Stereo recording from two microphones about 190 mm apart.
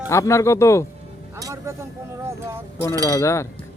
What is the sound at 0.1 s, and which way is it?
Speech, 15° left (ahead or behind).